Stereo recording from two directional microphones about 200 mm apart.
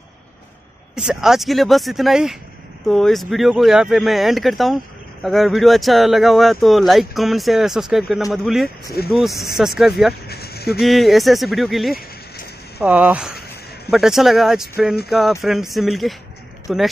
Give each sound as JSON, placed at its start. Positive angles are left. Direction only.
{"t": 0.9, "sound": "speech", "side_deg": 0}
{"t": 10.2, "sound": "a sound", "side_deg": 50}
{"t": 10.8, "sound": "speech", "side_deg": 0}